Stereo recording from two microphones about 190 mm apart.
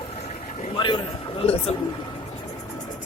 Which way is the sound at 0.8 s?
25° left (ahead or behind).